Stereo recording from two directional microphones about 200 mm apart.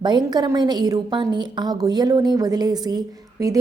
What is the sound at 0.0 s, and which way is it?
A woman's voice, 20° right (ahead or behind).